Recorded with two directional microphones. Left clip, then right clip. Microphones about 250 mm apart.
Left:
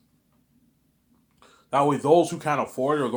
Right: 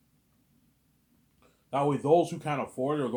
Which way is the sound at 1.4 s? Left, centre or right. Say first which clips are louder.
Left 7 dB; centre.